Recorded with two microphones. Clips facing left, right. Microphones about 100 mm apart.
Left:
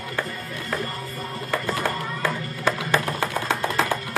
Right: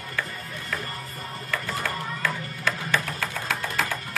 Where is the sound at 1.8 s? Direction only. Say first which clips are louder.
Left 4 dB; 25° left (ahead or behind).